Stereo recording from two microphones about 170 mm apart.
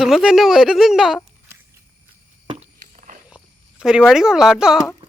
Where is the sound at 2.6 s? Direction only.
45° right (ahead or behind).